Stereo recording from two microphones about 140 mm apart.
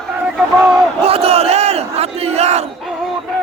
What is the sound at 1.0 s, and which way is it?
Battle cry, 45° right (ahead or behind).